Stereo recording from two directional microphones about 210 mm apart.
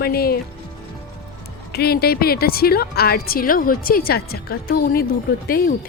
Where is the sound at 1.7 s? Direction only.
50° left (ahead or behind).